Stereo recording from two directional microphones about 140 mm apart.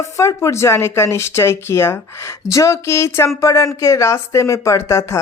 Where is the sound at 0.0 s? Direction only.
20° left (ahead or behind).